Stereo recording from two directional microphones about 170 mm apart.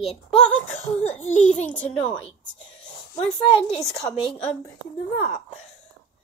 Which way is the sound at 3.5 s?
35° left (ahead or behind).